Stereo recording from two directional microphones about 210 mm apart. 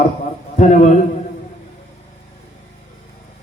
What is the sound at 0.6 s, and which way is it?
Speech, 30° left (ahead or behind).